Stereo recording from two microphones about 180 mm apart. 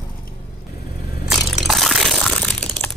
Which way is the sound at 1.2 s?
5° right (ahead or behind).